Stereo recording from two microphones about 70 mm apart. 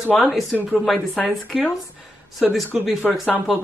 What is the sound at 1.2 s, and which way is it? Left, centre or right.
Speech, centre.